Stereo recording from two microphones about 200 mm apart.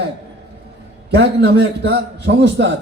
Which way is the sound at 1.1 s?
60° right (ahead or behind).